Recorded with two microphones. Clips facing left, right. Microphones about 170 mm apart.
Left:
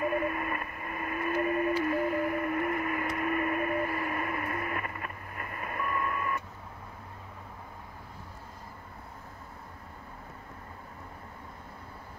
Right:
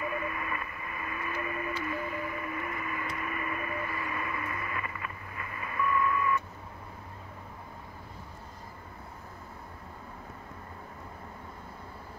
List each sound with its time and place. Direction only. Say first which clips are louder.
0.0 s radio: left 5 dB; 50° left (ahead or behind)